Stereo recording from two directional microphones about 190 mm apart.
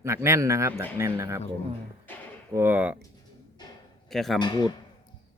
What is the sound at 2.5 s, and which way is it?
Speech, 10° right (ahead or behind).